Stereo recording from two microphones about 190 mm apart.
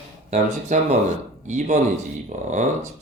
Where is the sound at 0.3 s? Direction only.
35° right (ahead or behind).